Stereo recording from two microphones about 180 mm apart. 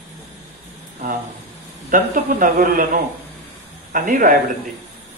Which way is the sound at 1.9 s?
50° right (ahead or behind).